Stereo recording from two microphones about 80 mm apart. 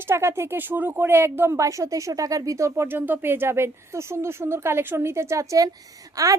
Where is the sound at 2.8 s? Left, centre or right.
Right.